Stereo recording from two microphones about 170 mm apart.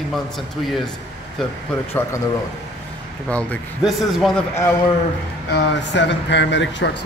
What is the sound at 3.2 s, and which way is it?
Speech, 10° left (ahead or behind).